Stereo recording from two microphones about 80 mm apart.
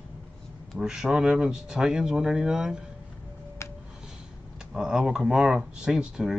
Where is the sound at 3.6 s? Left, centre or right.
Left.